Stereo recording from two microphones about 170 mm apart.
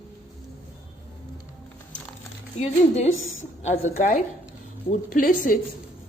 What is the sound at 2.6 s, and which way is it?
A woman's voice, 40° left (ahead or behind).